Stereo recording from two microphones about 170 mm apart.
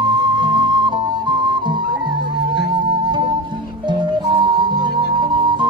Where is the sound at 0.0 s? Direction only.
25° right (ahead or behind).